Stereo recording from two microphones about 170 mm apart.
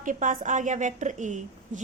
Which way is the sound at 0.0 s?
50° right (ahead or behind).